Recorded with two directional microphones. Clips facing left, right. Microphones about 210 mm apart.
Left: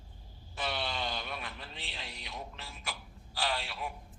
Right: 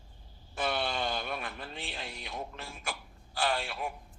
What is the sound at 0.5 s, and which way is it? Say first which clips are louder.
Speech: right 4 dB; 50° right (ahead or behind).